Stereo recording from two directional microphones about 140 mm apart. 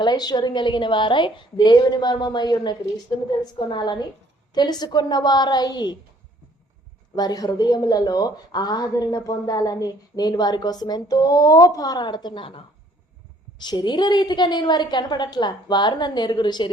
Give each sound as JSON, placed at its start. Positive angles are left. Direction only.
{"t": 0.0, "sound": "a woman's voice", "side_deg": 30}
{"t": 7.2, "sound": "a woman's voice", "side_deg": 30}